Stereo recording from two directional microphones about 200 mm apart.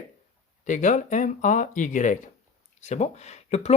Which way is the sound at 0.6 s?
40° left (ahead or behind).